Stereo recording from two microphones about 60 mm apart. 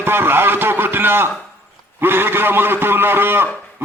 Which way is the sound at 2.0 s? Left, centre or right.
Right.